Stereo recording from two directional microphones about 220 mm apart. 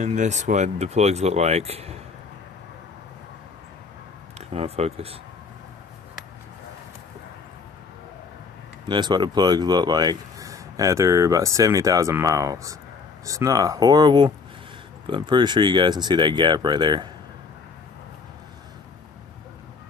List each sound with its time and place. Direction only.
0.0 s speech: 35° right (ahead or behind)
4.6 s speech: 30° right (ahead or behind)
8.8 s speech: 20° right (ahead or behind)